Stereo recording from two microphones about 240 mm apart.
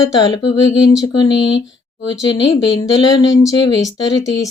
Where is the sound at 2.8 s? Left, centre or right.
Centre.